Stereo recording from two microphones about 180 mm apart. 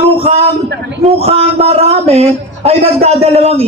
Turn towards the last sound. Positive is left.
turn(degrees=-35)  # may be behind; listen again after turning